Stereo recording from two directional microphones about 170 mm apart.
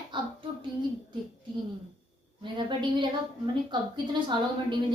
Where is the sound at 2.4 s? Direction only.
30° right (ahead or behind).